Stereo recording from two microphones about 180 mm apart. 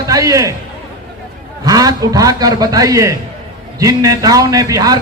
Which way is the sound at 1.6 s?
20° right (ahead or behind).